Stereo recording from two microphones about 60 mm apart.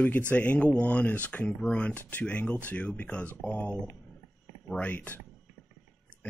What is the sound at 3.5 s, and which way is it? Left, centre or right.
Speech, left.